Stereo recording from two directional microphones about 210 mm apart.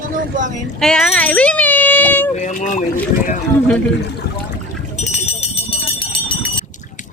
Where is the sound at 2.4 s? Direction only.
35° left (ahead or behind).